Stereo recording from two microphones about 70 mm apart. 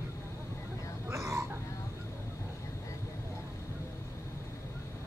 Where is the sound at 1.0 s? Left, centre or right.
Right.